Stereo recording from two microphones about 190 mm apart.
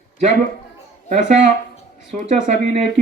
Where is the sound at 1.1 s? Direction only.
40° right (ahead or behind).